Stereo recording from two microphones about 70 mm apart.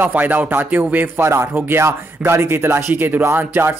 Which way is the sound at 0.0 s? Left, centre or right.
Right.